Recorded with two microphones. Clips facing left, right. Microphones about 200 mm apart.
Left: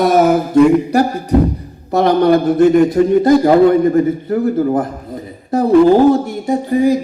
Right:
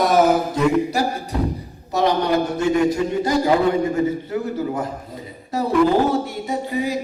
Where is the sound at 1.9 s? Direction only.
55° left (ahead or behind).